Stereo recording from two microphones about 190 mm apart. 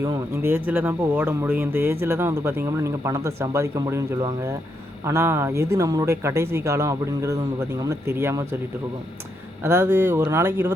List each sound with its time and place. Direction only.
0.0 s speech: 15° right (ahead or behind)
5.0 s speech: 15° right (ahead or behind)
9.6 s speech: 15° right (ahead or behind)